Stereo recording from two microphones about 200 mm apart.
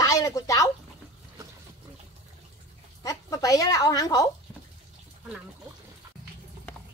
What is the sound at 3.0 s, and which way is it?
Speech, 15° left (ahead or behind).